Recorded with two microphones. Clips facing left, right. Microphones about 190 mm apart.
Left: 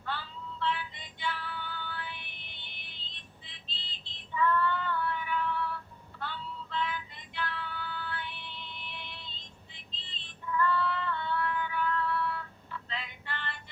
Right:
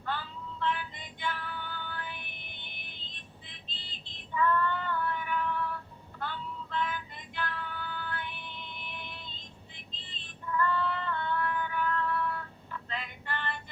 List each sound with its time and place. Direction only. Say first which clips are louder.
0.6 s music: right 1 dB; 50° right (ahead or behind)
6.1 s female singing: right 2 dB; 50° right (ahead or behind)
10.1 s music: even; 50° right (ahead or behind)
12.9 s female singing: right 4 dB; 50° right (ahead or behind)